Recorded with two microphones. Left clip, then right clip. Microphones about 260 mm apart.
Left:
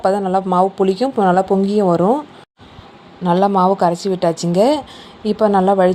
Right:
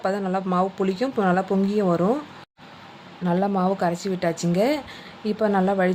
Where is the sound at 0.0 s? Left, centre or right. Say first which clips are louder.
Left 9 dB; centre.